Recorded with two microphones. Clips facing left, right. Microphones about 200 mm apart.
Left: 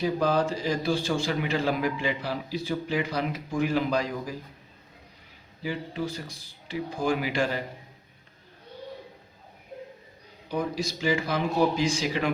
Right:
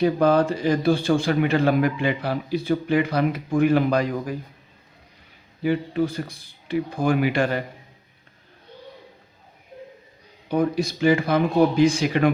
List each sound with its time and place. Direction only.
0.0 s a man's voice: 60° right (ahead or behind)
5.6 s a man's voice: 55° right (ahead or behind)
10.5 s a man's voice: 55° right (ahead or behind)